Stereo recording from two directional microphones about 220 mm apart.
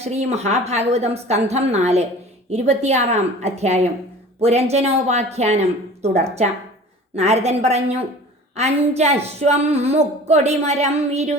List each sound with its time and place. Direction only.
0.0 s speech: 30° right (ahead or behind)